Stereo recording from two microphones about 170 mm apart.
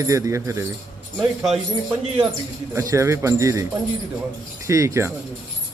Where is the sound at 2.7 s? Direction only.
15° right (ahead or behind).